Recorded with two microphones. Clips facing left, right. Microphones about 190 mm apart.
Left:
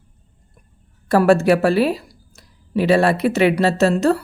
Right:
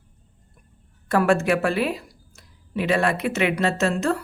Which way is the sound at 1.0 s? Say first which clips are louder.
Left 6 dB; 35° left (ahead or behind).